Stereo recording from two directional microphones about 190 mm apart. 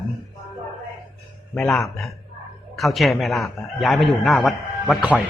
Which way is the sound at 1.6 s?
Centre (ahead or behind).